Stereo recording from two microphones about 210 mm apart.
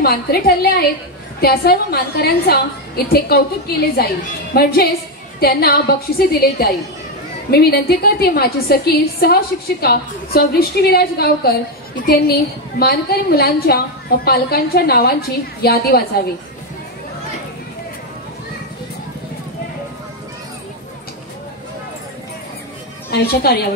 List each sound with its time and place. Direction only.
0.0 s a woman's voice: 50° left (ahead or behind)
4.6 s a woman's voice: 50° left (ahead or behind)
23.0 s a woman's voice: 45° left (ahead or behind)